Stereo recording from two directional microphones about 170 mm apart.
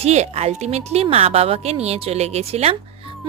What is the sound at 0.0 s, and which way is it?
A woman's voice, 40° right (ahead or behind).